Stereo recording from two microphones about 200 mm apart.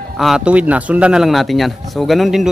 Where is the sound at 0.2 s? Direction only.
5° right (ahead or behind).